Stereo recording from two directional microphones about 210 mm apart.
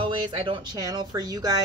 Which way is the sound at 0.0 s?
25° right (ahead or behind).